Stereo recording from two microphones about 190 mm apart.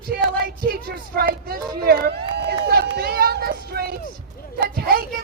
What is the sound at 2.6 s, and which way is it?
Run, 55° right (ahead or behind).